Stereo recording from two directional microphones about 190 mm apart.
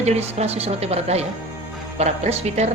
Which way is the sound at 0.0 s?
35° right (ahead or behind).